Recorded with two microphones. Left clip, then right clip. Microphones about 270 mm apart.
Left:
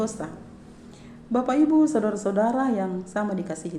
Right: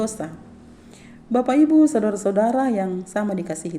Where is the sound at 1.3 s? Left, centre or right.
Right.